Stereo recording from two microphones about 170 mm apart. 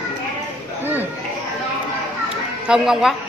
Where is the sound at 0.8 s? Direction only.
10° right (ahead or behind).